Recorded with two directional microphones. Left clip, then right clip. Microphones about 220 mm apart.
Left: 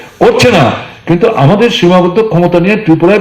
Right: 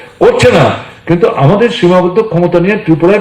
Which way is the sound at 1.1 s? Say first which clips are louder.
Left 1 dB; 45° left (ahead or behind).